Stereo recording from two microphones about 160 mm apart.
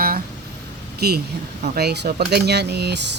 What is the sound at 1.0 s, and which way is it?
Speech, 90° right.